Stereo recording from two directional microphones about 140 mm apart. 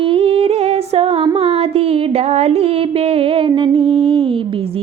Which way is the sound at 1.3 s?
45° right (ahead or behind).